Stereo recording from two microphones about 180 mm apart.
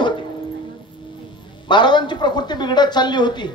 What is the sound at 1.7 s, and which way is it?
Speech, 25° left (ahead or behind).